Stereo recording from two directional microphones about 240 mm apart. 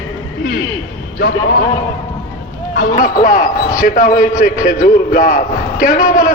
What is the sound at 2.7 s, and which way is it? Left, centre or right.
A man's voice, left.